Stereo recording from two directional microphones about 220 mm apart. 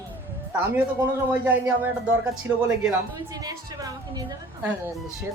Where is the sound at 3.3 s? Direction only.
15° right (ahead or behind).